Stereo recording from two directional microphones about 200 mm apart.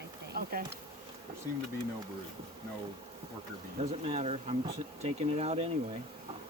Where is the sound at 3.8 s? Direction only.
30° right (ahead or behind).